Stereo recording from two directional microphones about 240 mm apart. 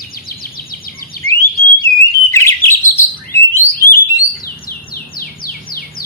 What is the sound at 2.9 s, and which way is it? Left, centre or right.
Bird, centre.